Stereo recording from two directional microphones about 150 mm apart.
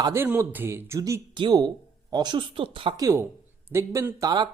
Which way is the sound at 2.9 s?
20° right (ahead or behind).